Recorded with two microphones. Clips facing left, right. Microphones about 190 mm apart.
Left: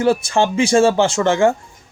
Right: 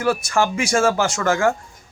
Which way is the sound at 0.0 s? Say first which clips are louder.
Left 4 dB; 30° left (ahead or behind).